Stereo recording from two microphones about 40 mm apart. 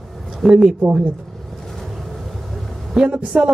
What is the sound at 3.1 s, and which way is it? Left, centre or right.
Speech, right.